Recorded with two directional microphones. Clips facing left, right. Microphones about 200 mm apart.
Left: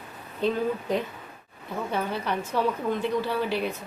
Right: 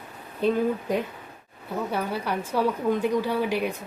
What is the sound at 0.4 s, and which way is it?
A woman's voice, 10° right (ahead or behind).